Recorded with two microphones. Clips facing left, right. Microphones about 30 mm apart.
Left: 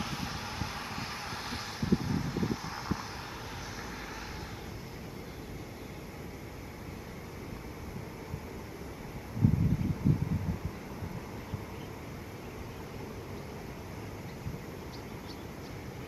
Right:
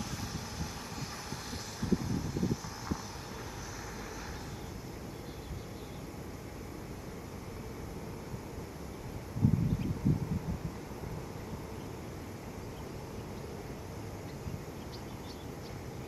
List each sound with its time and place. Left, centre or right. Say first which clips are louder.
0.0 s vehicle: left 3 dB; left